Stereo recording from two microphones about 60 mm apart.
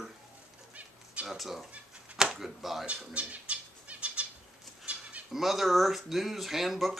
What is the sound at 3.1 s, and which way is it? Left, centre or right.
Bird flight, centre.